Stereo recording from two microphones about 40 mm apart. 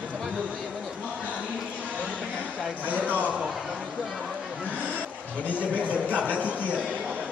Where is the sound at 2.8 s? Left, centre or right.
Right.